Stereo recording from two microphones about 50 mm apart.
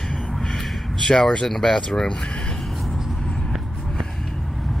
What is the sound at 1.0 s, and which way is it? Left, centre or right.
Speech, centre.